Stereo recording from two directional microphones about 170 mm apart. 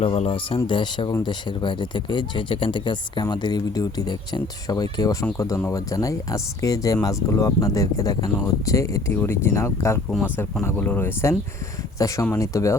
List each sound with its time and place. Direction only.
0.0 s speech: 35° left (ahead or behind); by 10.0 s 15° left (ahead or behind)
10.1 s speech: centre (ahead or behind)
10.3 s speech: 15° left (ahead or behind)